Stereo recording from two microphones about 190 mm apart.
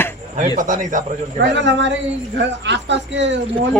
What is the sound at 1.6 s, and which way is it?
Speech, 70° right (ahead or behind).